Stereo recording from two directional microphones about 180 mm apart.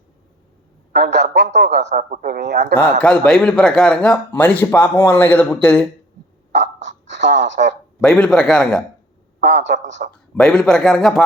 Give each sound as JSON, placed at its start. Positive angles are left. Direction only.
{"t": 0.9, "sound": "a woman's voice", "side_deg": -70}
{"t": 1.9, "sound": "a man's voice", "side_deg": -45}
{"t": 3.0, "sound": "speech", "side_deg": 5}
{"t": 6.5, "sound": "a sound", "side_deg": -80}
{"t": 8.0, "sound": "speech", "side_deg": 5}
{"t": 9.4, "sound": "a woman's voice", "side_deg": -75}
{"t": 10.0, "sound": "a man's voice", "side_deg": -55}
{"t": 10.3, "sound": "speech", "side_deg": 5}